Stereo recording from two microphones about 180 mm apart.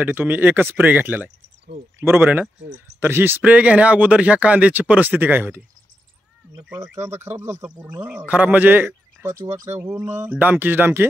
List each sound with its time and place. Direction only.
0.0 s speech: 10° right (ahead or behind)
6.7 s speech: 10° right (ahead or behind)
9.5 s speech: 40° right (ahead or behind)
9.8 s speech: 10° right (ahead or behind)